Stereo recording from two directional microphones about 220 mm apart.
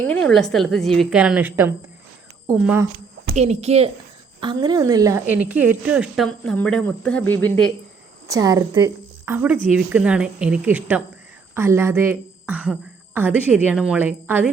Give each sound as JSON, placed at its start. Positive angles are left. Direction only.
{"t": 0.1, "sound": "a woman's voice", "side_deg": 5}
{"t": 3.3, "sound": "a woman's voice", "side_deg": -30}
{"t": 8.3, "sound": "a woman's voice", "side_deg": -15}